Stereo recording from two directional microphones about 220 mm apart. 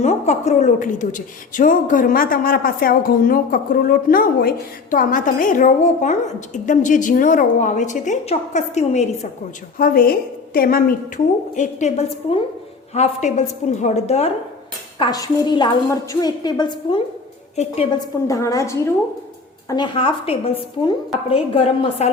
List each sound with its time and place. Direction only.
0.0 s a woman's voice: 30° left (ahead or behind)
18.3 s a woman's voice: 15° left (ahead or behind)